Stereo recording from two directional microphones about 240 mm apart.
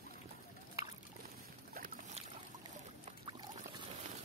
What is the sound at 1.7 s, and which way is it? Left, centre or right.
Boat, right.